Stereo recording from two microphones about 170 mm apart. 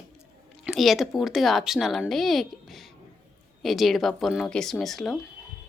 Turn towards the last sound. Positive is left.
turn(degrees=0)  # may be behind; listen again after turning